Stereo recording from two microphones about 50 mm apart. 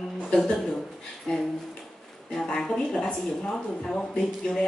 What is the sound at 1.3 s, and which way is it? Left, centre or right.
Speech, centre.